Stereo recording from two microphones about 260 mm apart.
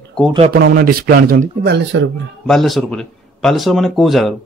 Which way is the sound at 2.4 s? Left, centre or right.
Centre.